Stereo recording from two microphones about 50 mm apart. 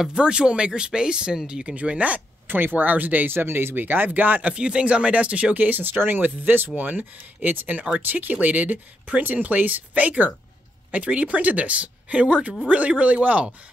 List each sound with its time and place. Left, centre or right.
0.0 s speech: centre
2.4 s speech: right
3.3 s speech: right